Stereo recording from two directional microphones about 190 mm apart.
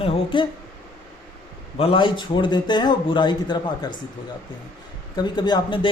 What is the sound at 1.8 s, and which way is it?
A man's voice, 30° left (ahead or behind).